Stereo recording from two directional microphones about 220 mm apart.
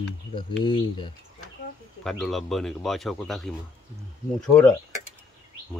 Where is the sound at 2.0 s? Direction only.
Centre (ahead or behind).